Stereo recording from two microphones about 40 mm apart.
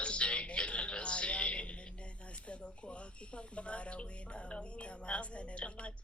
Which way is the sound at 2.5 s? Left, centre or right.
Left.